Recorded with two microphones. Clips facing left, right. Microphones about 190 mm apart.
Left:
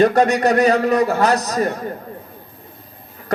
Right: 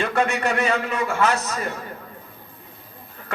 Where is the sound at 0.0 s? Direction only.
40° left (ahead or behind).